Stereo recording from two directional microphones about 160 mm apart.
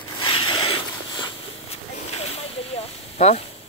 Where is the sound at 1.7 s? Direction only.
40° left (ahead or behind).